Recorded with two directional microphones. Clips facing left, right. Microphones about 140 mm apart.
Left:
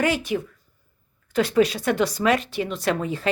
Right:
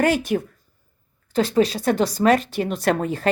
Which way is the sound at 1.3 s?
30° right (ahead or behind).